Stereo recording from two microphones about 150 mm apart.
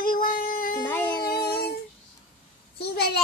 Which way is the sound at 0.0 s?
70° left (ahead or behind).